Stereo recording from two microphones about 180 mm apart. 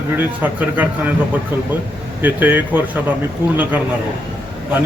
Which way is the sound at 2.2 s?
10° right (ahead or behind).